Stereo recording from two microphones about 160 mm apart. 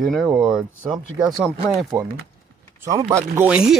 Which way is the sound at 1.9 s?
20° right (ahead or behind).